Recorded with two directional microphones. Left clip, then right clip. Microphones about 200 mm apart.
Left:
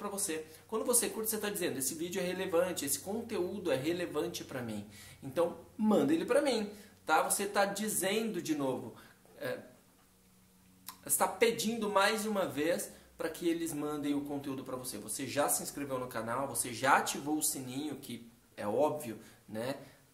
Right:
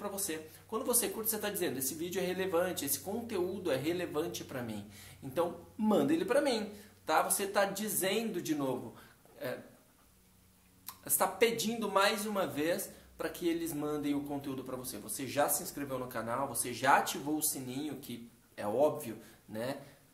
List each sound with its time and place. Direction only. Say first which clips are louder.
0.0 s speech: left 1 dB; 5° left (ahead or behind)
10.9 s speech: even; centre (ahead or behind)